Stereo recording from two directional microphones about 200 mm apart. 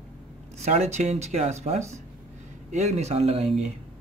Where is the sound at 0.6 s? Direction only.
35° right (ahead or behind).